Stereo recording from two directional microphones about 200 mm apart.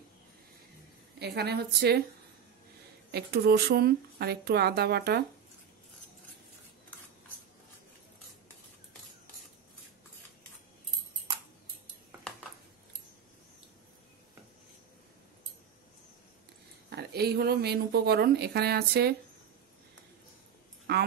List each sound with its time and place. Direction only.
1.2 s speech: 55° right (ahead or behind)
3.1 s speech: 55° right (ahead or behind)
16.9 s speech: 50° right (ahead or behind)